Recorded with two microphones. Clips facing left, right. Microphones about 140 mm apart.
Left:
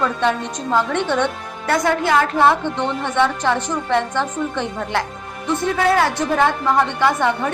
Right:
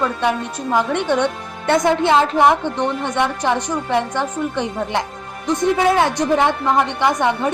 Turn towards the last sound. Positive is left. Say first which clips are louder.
# even
turn(degrees=-20)  # may be behind; listen again after turning